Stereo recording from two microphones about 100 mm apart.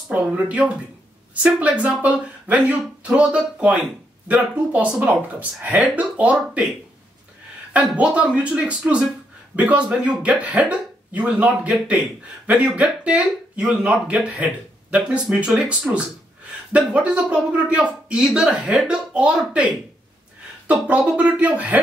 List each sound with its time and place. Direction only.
0.1 s speech: 15° right (ahead or behind)
7.7 s speech: 15° right (ahead or behind)